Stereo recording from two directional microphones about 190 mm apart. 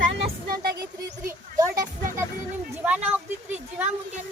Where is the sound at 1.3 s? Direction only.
15° right (ahead or behind).